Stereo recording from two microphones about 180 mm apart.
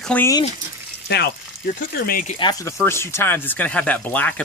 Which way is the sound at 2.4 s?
20° left (ahead or behind).